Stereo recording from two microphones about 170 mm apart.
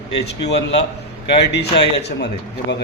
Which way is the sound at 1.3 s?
80° left.